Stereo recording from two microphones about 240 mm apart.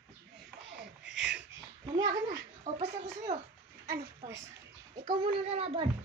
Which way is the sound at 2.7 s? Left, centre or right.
Right.